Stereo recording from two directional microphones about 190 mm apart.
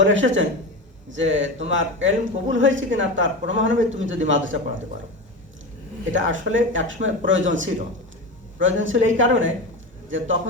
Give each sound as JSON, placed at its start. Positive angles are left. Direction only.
{"t": 0.0, "sound": "a man's voice", "side_deg": -80}
{"t": 6.1, "sound": "a man's voice", "side_deg": -85}